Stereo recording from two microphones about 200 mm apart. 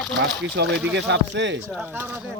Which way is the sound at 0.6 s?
60° right (ahead or behind).